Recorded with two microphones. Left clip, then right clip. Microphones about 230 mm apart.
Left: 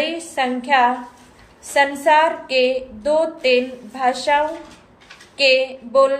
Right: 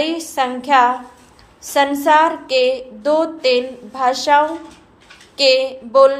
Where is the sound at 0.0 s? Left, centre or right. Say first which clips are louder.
Right 2 dB; centre.